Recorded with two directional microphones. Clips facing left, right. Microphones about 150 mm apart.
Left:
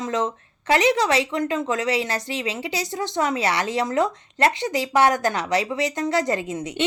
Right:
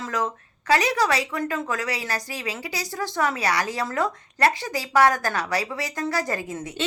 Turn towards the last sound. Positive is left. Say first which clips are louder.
# left 4 dB
turn(degrees=20)  # may be behind; listen again after turning